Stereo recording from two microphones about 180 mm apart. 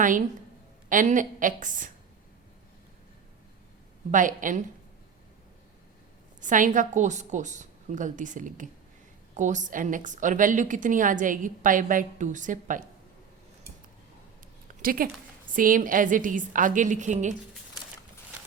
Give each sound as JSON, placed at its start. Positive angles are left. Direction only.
{"t": 0.9, "sound": "a woman's voice", "side_deg": -45}
{"t": 4.1, "sound": "a woman's voice", "side_deg": -45}
{"t": 6.4, "sound": "a woman's voice", "side_deg": -45}
{"t": 14.8, "sound": "a woman's voice", "side_deg": -50}